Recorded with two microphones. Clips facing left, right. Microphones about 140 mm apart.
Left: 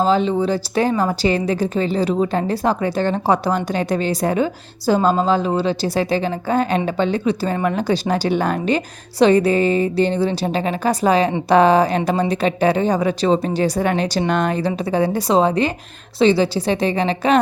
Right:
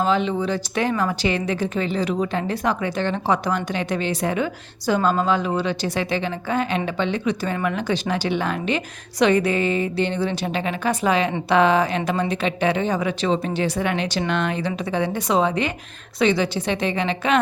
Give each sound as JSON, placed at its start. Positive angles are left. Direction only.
{"t": 0.0, "sound": "a woman's voice", "side_deg": 35}